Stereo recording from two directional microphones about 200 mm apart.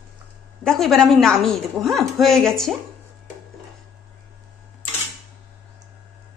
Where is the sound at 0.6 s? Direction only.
Centre (ahead or behind).